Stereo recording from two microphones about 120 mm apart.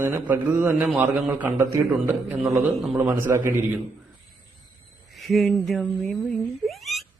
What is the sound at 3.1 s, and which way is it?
Speech, 20° right (ahead or behind).